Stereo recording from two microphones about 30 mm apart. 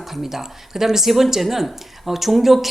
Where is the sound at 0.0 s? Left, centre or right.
Centre.